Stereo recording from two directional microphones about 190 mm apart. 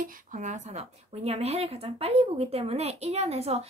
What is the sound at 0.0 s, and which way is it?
Speech, 45° right (ahead or behind).